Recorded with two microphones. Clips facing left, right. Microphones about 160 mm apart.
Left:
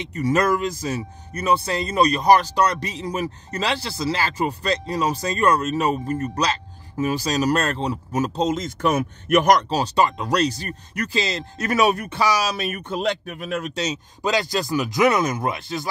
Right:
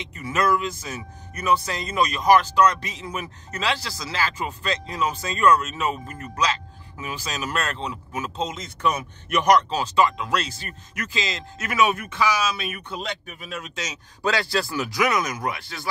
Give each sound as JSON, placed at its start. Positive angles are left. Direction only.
{"t": 0.1, "sound": "speech", "side_deg": 40}
{"t": 13.3, "sound": "a man's voice", "side_deg": 55}
{"t": 14.2, "sound": "speech", "side_deg": 20}